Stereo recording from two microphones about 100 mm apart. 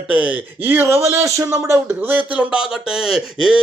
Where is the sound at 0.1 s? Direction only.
15° right (ahead or behind).